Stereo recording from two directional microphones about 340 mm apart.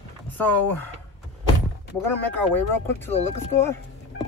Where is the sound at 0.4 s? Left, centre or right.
Centre.